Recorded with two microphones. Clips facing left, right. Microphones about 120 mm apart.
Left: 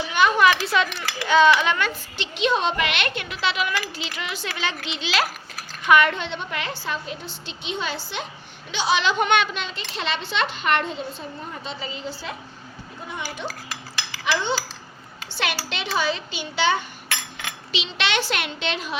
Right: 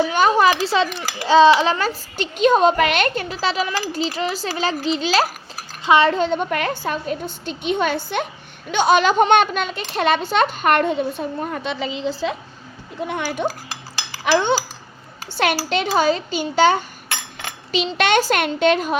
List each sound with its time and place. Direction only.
0.0 s a sound: 40° right (ahead or behind)
1.2 s a child's voice: 30° right (ahead or behind)
5.8 s speech: 30° right (ahead or behind); by 12.1 s 90° right
13.0 s a child's voice: 65° right (ahead or behind); by 18.9 s 50° right (ahead or behind)